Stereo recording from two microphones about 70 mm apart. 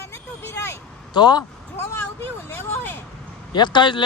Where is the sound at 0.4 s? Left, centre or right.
Left.